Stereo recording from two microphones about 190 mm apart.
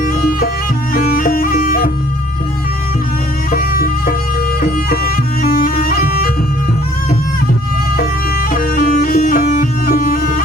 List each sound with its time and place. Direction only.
0.0 s music: 50° left (ahead or behind)
0.9 s bagpipes: 50° left (ahead or behind)
3.5 s music: 50° left (ahead or behind)
7.9 s bagpipes: 50° left (ahead or behind)